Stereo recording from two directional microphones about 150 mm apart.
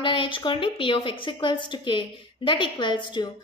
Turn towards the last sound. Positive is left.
turn(degrees=30)  # may be behind; listen again after turning